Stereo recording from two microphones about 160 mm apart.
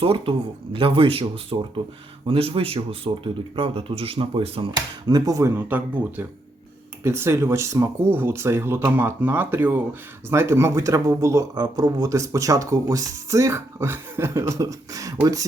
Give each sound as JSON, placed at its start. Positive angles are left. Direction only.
{"t": 0.0, "sound": "speech", "side_deg": -35}